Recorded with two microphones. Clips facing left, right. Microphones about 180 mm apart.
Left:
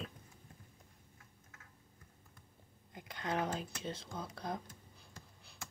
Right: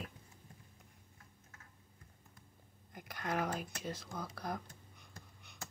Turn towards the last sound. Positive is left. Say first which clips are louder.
# even
turn(degrees=25)  # may be behind; listen again after turning